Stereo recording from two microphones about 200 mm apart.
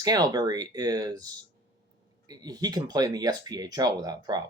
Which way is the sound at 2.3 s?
20° right (ahead or behind).